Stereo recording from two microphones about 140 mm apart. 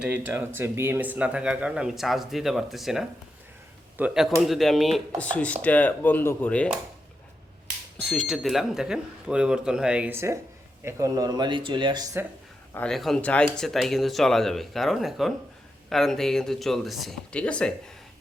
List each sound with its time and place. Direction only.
0.0 s speech: 15° right (ahead or behind); by 6.7 s 10° left (ahead or behind)
7.9 s speech: 5° left (ahead or behind); by 12.2 s 25° right (ahead or behind)
12.7 s speech: 5° left (ahead or behind)